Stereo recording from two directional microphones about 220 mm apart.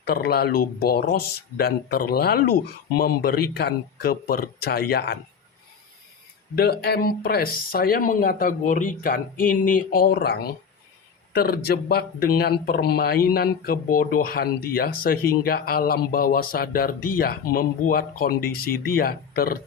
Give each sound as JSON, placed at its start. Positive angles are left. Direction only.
{"t": 0.0, "sound": "speech", "side_deg": 45}
{"t": 6.6, "sound": "speech", "side_deg": 45}